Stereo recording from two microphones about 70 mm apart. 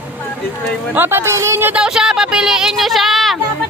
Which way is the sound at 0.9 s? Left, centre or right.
Right.